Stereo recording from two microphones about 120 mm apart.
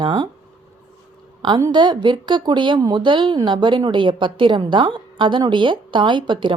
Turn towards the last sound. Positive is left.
turn(degrees=-40)  # may be behind; listen again after turning